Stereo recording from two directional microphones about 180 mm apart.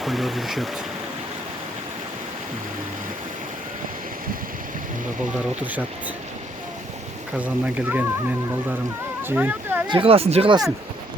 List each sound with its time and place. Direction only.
0.0 s speech: centre (ahead or behind)
7.3 s speech: 10° right (ahead or behind)
9.2 s speech: 10° right (ahead or behind)
9.8 s speech: 30° right (ahead or behind)